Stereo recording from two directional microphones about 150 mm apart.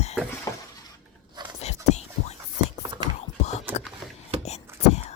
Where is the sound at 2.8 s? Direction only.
30° right (ahead or behind).